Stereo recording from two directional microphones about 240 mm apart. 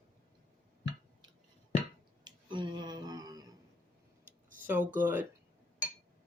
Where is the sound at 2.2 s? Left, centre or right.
Centre.